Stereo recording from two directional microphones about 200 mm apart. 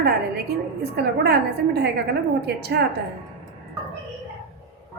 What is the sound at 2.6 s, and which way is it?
Speech, 55° right (ahead or behind).